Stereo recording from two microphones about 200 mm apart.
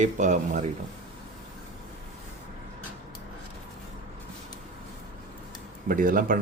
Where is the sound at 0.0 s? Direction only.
35° right (ahead or behind).